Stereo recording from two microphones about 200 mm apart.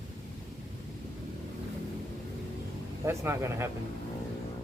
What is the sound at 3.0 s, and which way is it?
Speech, 10° right (ahead or behind).